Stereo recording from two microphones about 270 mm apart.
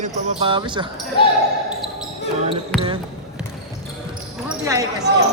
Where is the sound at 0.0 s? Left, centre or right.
Centre.